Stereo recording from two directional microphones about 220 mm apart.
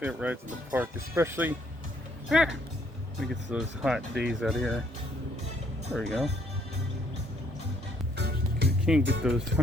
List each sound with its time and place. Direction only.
0.0 s speech: 5° right (ahead or behind)
5.9 s speech: centre (ahead or behind)
8.1 s music: 50° right (ahead or behind)
8.8 s speech: 5° right (ahead or behind)